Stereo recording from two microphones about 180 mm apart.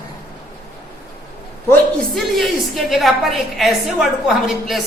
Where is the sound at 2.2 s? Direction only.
Centre (ahead or behind).